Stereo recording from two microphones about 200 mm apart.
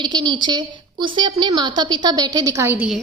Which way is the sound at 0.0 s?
20° right (ahead or behind).